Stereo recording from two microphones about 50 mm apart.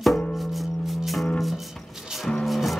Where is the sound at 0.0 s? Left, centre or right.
Centre.